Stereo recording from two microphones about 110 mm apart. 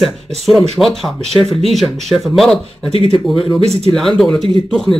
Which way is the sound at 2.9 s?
55° left (ahead or behind).